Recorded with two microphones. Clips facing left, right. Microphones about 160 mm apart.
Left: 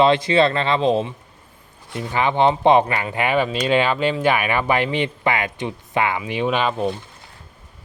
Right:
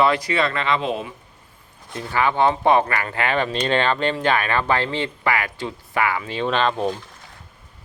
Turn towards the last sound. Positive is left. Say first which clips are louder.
# left 1 dB
turn(degrees=10)  # may be behind; listen again after turning